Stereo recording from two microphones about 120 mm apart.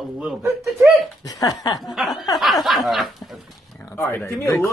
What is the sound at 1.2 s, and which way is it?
Speech, 30° left (ahead or behind).